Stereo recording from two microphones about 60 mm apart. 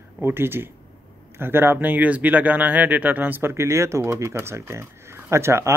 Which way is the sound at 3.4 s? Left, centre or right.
Right.